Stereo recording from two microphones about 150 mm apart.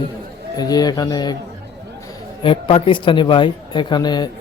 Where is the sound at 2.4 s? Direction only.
35° left (ahead or behind).